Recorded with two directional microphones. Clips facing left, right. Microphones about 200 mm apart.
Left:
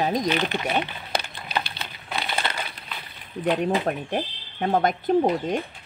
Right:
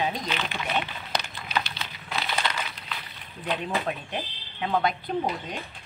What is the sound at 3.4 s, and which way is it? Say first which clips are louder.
Speech: left 7 dB; 45° left (ahead or behind).